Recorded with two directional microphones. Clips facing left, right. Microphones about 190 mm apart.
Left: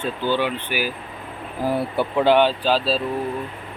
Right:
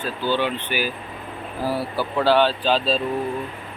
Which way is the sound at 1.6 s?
20° left (ahead or behind).